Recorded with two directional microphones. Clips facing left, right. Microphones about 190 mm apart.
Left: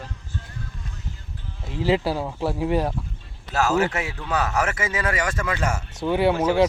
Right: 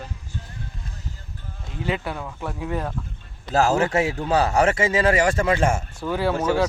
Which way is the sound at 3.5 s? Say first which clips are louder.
Right 2 dB; 30° right (ahead or behind).